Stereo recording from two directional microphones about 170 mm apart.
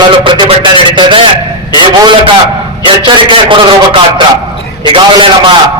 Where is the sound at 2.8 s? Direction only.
30° right (ahead or behind).